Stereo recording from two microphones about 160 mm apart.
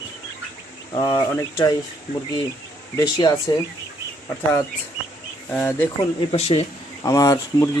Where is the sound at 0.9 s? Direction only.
25° left (ahead or behind).